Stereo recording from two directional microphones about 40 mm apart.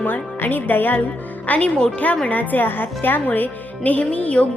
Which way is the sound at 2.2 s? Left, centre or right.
Left.